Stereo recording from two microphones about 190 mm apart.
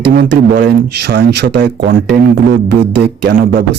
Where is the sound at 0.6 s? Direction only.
70° right (ahead or behind).